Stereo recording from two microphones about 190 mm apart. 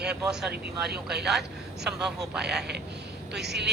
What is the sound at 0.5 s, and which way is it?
Speech, 60° right (ahead or behind).